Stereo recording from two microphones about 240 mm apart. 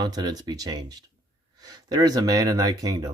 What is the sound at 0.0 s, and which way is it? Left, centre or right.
Speech, centre.